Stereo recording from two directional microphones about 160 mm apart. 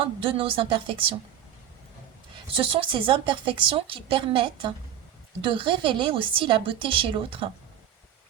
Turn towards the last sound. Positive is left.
turn(degrees=-35)  # may be behind; listen again after turning